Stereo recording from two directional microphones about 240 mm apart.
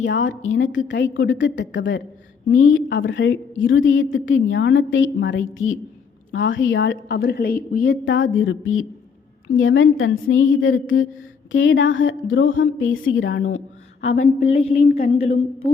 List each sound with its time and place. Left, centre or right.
0.0 s a woman's voice: left
8.0 s a woman's voice: left
14.3 s a sound: left